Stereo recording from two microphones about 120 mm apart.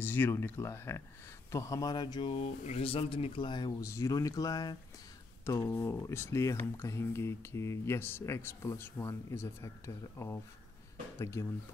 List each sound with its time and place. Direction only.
0.0 s speech: 15° left (ahead or behind); by 3.7 s 40° left (ahead or behind)
3.8 s speech: 25° left (ahead or behind)